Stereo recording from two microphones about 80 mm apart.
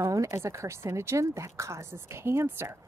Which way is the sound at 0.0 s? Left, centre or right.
Right.